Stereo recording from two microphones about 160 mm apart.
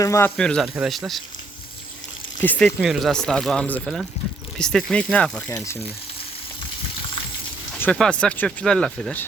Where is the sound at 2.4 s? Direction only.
10° left (ahead or behind).